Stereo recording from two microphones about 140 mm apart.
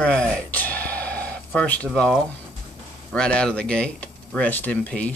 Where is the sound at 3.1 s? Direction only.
5° left (ahead or behind).